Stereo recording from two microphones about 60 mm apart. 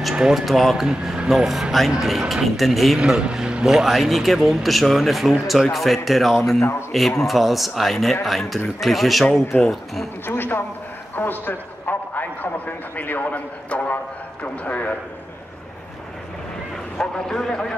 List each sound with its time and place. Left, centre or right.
0.1 s a sound: centre
0.5 s speech: centre
3.1 s speech: centre
10.2 s a man's voice: left
11.1 s a sound: left
12.9 s a man's voice: left
17.0 s a man's voice: centre